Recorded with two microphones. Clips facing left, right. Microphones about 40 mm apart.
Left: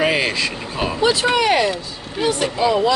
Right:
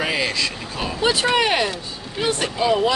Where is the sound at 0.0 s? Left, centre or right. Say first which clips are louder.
Left 4 dB; left.